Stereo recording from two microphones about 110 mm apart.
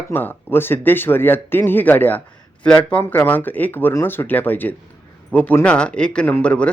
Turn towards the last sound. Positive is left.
turn(degrees=10)  # may be behind; listen again after turning